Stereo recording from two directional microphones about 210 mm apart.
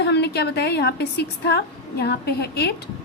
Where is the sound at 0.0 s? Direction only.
50° left (ahead or behind).